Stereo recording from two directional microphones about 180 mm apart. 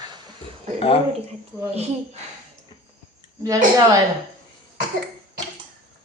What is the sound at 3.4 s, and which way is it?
Speech, 20° right (ahead or behind).